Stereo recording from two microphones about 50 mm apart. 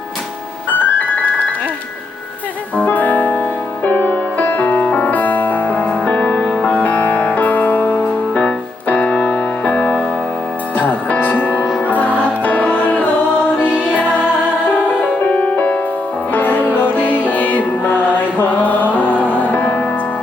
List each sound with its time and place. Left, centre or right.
0.7 s keyboard: left
2.7 s music: left
6.8 s music: left